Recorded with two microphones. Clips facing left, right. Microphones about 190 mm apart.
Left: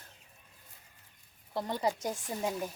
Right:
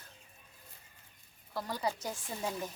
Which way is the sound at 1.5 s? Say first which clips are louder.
Left 4 dB; 25° left (ahead or behind).